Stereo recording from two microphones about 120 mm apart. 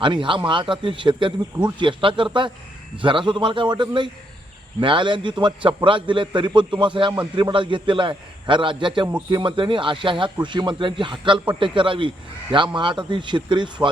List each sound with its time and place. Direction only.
0.0 s a man's voice: 45° right (ahead or behind)